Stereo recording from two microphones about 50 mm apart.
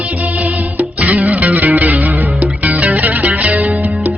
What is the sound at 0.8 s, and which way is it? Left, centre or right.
Music, right.